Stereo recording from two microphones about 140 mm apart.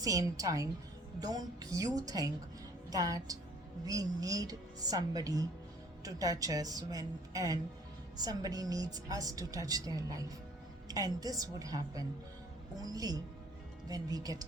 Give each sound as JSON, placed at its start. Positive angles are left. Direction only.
{"t": 0.0, "sound": "a woman's voice", "side_deg": -25}